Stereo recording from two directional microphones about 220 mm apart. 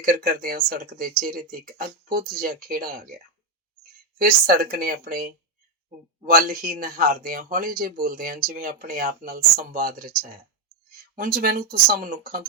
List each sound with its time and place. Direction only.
0.0 s speech: 40° right (ahead or behind)
4.2 s speech: 40° right (ahead or behind)